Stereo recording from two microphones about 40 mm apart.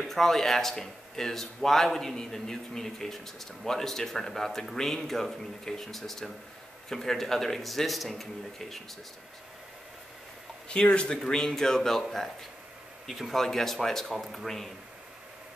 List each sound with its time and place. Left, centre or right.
0.1 s speech: centre
10.7 s speech: left
11.2 s speech: centre
13.1 s speech: centre
13.4 s speech: centre